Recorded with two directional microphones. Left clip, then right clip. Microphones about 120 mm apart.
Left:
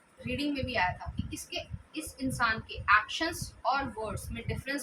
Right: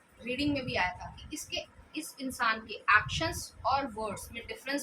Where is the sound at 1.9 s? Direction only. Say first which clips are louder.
Left 2 dB; 15° right (ahead or behind).